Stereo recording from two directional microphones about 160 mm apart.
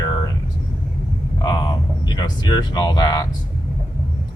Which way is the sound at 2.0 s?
25° left (ahead or behind).